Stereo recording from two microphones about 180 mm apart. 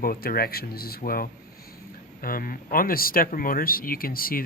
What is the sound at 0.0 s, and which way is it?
Speech, 55° left (ahead or behind).